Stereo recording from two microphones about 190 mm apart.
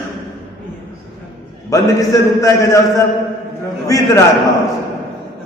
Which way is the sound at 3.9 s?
15° left (ahead or behind).